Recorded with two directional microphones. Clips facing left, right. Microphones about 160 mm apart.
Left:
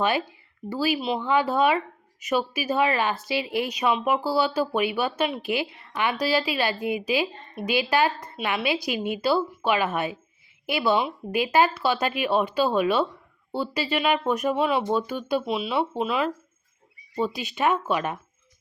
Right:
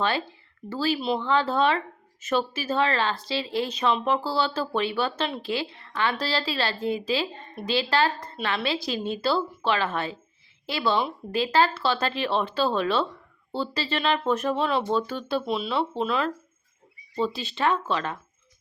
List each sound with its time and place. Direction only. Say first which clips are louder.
0.0 s a woman's voice: left 2 dB; 15° left (ahead or behind)